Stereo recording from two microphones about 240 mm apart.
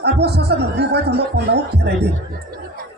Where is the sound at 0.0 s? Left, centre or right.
Right.